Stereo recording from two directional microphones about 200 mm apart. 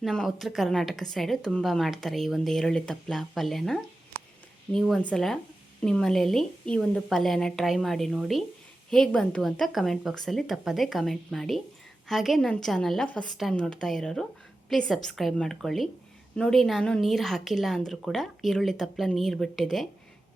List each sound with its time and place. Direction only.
0.0 s a woman's voice: centre (ahead or behind)